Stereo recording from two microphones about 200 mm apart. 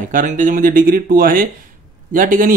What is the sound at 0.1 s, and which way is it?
Speech, 40° right (ahead or behind).